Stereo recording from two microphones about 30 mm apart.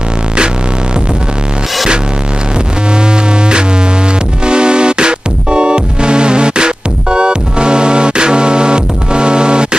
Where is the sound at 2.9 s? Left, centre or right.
Right.